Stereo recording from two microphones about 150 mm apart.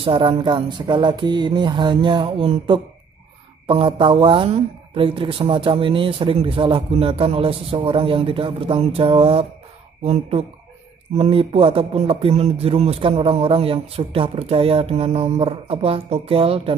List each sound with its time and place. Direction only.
0.0 s speech: 35° right (ahead or behind)